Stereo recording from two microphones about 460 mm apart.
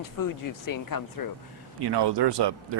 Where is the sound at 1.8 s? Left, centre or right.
Right.